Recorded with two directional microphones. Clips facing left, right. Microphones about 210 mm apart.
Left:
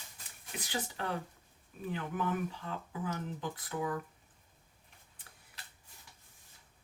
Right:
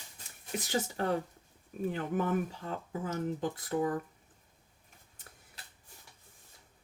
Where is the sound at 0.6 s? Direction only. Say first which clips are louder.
Right 6 dB; 45° right (ahead or behind).